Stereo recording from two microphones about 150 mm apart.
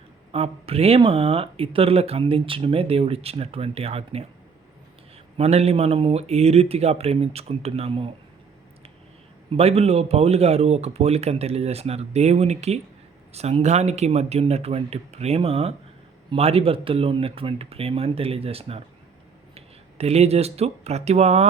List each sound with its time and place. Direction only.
0.3 s speech: 40° right (ahead or behind)
5.4 s speech: 45° right (ahead or behind)
9.5 s speech: 45° right (ahead or behind)